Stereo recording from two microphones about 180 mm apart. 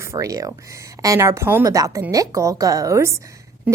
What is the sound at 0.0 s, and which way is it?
A woman's voice, 15° right (ahead or behind).